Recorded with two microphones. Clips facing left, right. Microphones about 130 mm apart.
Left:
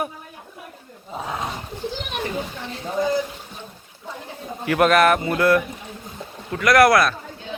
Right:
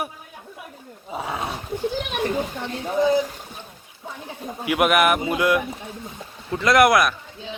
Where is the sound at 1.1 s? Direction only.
10° right (ahead or behind).